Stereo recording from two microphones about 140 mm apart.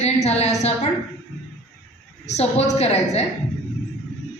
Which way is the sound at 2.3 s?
50° left (ahead or behind).